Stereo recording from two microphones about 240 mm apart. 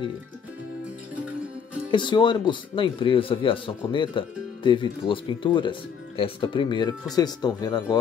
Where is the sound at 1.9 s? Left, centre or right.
Centre.